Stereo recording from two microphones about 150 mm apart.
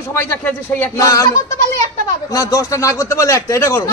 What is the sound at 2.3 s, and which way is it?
A man's voice, 20° left (ahead or behind).